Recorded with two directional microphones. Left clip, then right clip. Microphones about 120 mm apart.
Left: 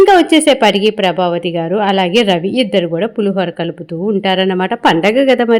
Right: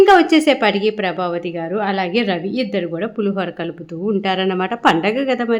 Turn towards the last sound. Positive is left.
turn(degrees=40)  # may be behind; listen again after turning